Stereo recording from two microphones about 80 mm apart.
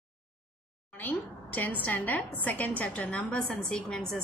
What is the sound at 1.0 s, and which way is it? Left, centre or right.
A woman's voice, left.